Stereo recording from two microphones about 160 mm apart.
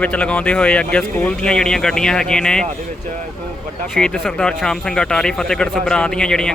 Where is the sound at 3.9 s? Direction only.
5° left (ahead or behind).